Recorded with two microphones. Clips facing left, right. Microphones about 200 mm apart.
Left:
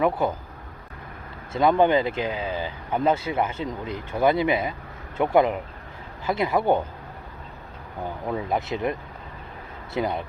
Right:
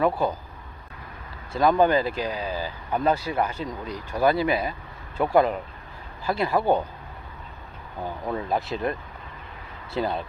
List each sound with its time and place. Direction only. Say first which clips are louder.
0.2 s speech: left 1 dB; 20° left (ahead or behind)
1.5 s speech: left 1 dB; 20° left (ahead or behind)
8.3 s speech: left 1 dB; 15° left (ahead or behind)